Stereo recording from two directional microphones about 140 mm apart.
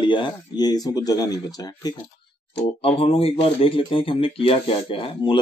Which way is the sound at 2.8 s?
45° left (ahead or behind).